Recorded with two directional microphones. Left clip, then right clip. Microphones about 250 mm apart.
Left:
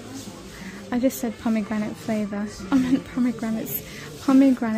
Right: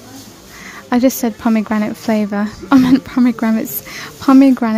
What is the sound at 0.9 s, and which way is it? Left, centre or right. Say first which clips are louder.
A woman's voice: right 10 dB; centre.